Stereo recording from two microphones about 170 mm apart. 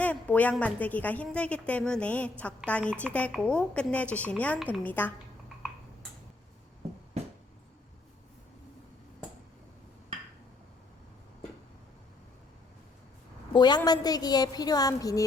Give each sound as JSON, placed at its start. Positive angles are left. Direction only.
{"t": 0.0, "sound": "a woman's voice", "side_deg": 10}
{"t": 13.5, "sound": "a woman's voice", "side_deg": 25}